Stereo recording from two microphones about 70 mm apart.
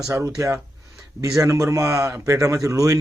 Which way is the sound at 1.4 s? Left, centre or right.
Right.